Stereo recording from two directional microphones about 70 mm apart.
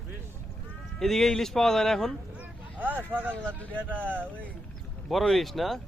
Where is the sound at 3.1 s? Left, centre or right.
Right.